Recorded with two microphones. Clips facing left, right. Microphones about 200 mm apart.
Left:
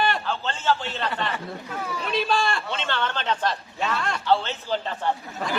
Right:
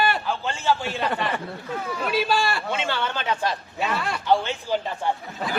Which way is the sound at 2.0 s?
5° right (ahead or behind).